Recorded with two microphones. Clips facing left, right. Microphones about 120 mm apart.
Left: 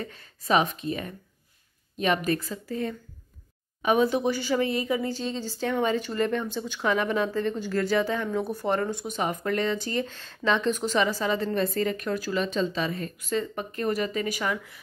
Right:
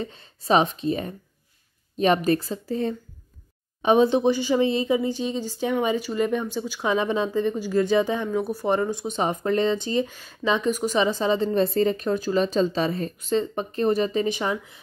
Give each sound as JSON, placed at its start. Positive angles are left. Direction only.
{"t": 0.0, "sound": "speech", "side_deg": -25}